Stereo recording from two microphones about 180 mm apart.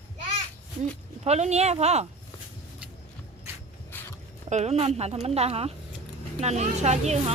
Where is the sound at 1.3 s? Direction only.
40° right (ahead or behind).